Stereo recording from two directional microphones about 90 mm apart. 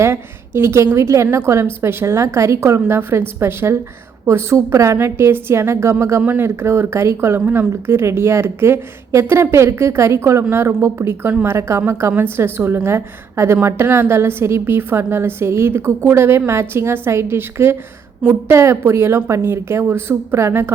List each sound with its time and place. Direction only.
0.0 s a woman's voice: 25° right (ahead or behind)